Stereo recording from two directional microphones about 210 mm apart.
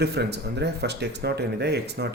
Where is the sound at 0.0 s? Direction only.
50° right (ahead or behind).